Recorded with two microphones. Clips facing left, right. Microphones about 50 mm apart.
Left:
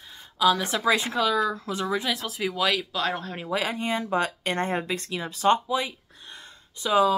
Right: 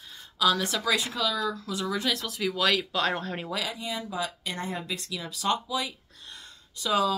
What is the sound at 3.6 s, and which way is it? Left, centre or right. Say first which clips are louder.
Speech: left 7 dB; left.